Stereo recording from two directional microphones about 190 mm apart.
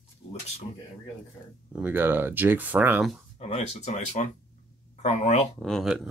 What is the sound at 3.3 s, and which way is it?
Speech, 35° left (ahead or behind).